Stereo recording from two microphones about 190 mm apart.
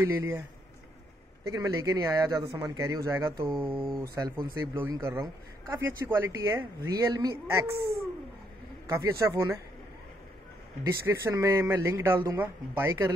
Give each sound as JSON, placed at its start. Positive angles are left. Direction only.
{"t": 0.0, "sound": "speech", "side_deg": -15}
{"t": 1.5, "sound": "speech", "side_deg": -20}
{"t": 3.7, "sound": "speech", "side_deg": 5}
{"t": 4.6, "sound": "speech", "side_deg": -10}
{"t": 8.8, "sound": "speech", "side_deg": -15}
{"t": 10.8, "sound": "speech", "side_deg": -15}